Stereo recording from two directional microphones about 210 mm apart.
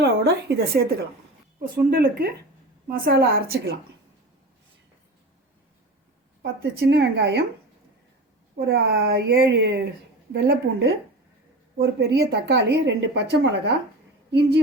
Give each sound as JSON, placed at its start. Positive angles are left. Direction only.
{"t": 0.0, "sound": "a woman's voice", "side_deg": -50}
{"t": 1.9, "sound": "a woman's voice", "side_deg": -45}
{"t": 6.4, "sound": "a woman's voice", "side_deg": -50}
{"t": 8.5, "sound": "a woman's voice", "side_deg": -50}